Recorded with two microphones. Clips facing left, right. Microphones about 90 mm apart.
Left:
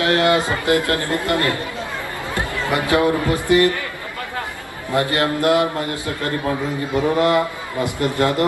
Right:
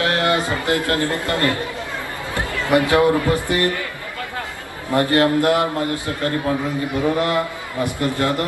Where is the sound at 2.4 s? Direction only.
20° left (ahead or behind).